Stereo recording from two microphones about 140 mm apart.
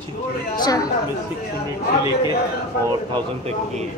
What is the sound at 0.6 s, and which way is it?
Speech, 25° left (ahead or behind).